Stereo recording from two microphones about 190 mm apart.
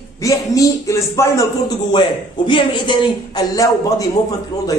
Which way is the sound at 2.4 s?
25° left (ahead or behind).